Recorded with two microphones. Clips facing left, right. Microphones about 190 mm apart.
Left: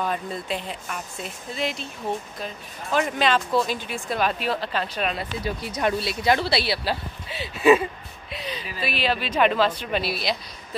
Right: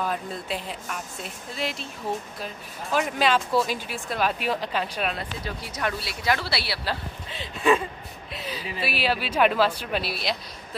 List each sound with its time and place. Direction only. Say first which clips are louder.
0.0 s speech: left 2 dB; centre (ahead or behind)
5.4 s speech: left 7 dB; 20° left (ahead or behind)
8.3 s speech: left 1 dB; 5° right (ahead or behind)